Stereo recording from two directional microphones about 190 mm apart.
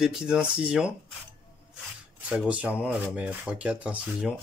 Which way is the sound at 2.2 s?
5° right (ahead or behind).